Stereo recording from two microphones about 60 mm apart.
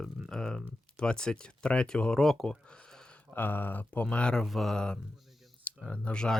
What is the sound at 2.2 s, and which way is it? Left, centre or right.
Speech, centre.